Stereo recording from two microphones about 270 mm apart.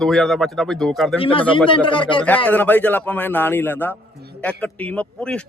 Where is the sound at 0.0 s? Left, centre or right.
Centre.